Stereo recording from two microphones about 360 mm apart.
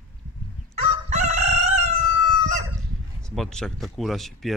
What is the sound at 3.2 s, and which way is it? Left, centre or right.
Speech, centre.